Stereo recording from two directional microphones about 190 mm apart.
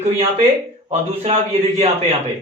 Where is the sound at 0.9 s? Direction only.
35° right (ahead or behind).